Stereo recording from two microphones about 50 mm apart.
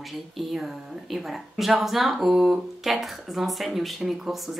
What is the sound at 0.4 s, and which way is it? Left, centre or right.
Speech, centre.